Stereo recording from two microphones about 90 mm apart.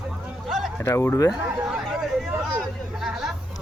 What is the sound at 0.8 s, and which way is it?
Speech, 30° left (ahead or behind).